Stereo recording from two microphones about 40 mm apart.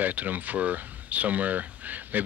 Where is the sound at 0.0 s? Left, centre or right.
Right.